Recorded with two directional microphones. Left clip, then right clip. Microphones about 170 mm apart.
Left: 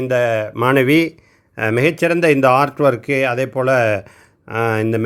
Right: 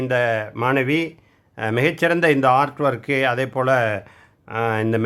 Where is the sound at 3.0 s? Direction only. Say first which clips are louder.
Left 3 dB; 10° left (ahead or behind).